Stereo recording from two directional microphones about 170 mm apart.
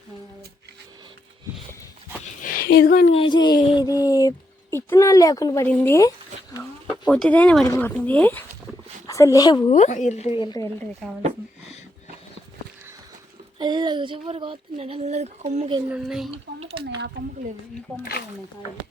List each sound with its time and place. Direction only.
2.4 s a sound: 60° left (ahead or behind)
3.1 s speech: 30° left (ahead or behind)
5.6 s a sound: 10° left (ahead or behind)
7.1 s speech: 10° left (ahead or behind); by 9.7 s 25° left (ahead or behind)
9.7 s a woman's voice: 45° left (ahead or behind); by 10.7 s 25° left (ahead or behind)
11.0 s speech: centre (ahead or behind)
13.6 s speech: 25° right (ahead or behind); by 15.7 s 40° right (ahead or behind)
15.9 s speech: 5° right (ahead or behind)
17.2 s speech: 75° right (ahead or behind)